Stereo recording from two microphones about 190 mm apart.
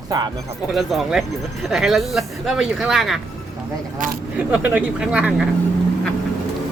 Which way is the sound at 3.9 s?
45° right (ahead or behind).